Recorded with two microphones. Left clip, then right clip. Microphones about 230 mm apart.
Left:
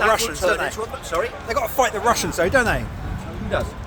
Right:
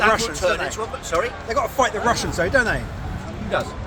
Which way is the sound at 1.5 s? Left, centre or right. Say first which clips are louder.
Even; left.